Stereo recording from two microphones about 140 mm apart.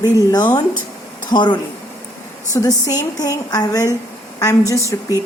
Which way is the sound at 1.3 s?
35° left (ahead or behind).